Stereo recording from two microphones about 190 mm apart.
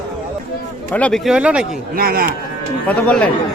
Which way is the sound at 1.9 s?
50° right (ahead or behind).